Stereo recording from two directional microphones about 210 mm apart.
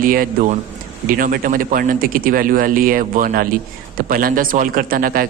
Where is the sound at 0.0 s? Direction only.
40° right (ahead or behind).